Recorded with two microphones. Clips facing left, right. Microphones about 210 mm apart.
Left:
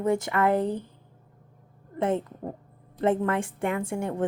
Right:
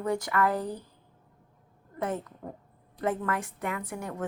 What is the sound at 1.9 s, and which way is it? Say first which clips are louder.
A woman's voice: left 6 dB; 25° left (ahead or behind).